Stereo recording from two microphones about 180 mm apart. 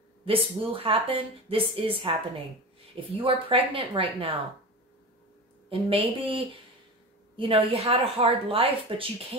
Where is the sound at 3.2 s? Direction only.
30° right (ahead or behind).